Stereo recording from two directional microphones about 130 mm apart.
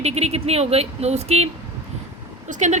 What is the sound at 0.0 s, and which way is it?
A woman's voice, 55° right (ahead or behind).